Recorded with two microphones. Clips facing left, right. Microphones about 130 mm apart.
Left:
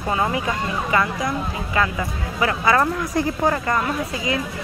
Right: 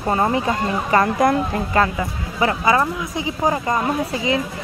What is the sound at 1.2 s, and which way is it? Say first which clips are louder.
Speech: right 7 dB; 55° right (ahead or behind).